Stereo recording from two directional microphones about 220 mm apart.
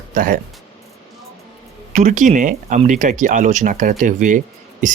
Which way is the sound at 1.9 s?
35° right (ahead or behind).